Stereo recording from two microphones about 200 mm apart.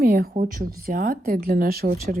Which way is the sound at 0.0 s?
50° right (ahead or behind).